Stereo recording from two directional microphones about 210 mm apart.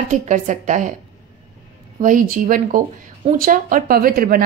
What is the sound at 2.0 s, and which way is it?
A woman's voice, 40° right (ahead or behind).